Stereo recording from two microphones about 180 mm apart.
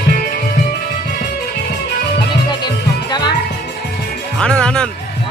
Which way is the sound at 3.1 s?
25° left (ahead or behind).